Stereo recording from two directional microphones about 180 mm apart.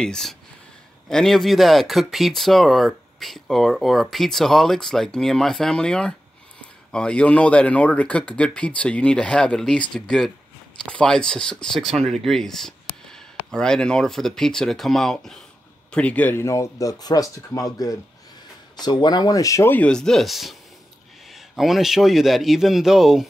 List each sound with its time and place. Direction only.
0.0 s speech: 5° left (ahead or behind)